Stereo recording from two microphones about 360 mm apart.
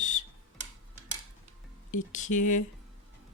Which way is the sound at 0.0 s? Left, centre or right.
Centre.